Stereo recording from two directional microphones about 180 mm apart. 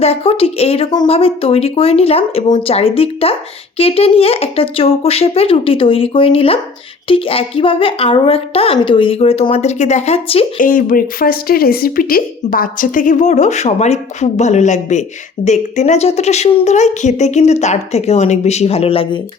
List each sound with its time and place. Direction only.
0.0 s speech: 35° left (ahead or behind)
10.6 s speech: 50° left (ahead or behind); by 19.2 s 30° left (ahead or behind)